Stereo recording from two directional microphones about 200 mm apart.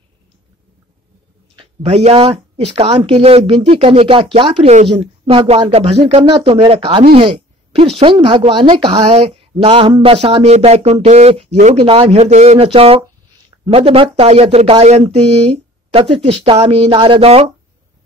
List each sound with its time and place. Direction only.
1.6 s speech: 30° right (ahead or behind)